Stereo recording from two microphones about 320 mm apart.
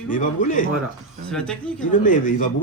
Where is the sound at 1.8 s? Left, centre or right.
Left.